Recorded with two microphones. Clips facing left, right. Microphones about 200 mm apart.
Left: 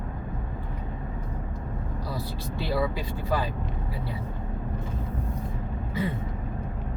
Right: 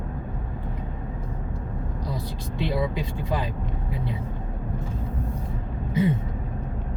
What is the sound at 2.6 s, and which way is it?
Speech, 20° right (ahead or behind).